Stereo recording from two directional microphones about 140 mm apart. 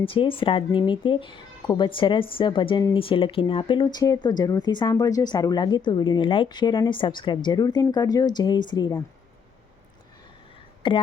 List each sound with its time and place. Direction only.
0.0 s speech: 40° left (ahead or behind)
10.8 s speech: 35° left (ahead or behind)